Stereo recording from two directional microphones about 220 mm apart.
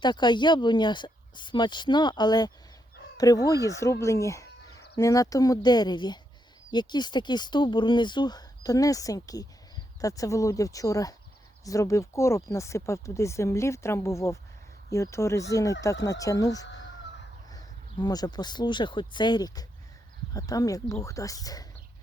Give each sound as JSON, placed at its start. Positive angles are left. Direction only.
{"t": 0.0, "sound": "speech", "side_deg": 20}